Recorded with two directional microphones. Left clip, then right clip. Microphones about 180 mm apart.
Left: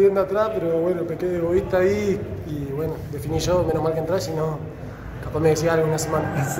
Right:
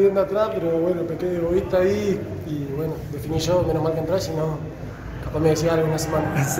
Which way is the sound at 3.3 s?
40° left (ahead or behind).